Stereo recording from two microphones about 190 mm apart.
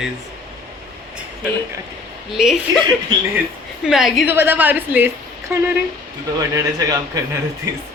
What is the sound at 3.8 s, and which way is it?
A woman's voice, centre (ahead or behind).